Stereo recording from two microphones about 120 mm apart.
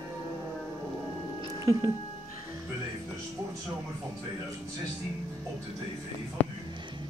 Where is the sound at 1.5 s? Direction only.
25° right (ahead or behind).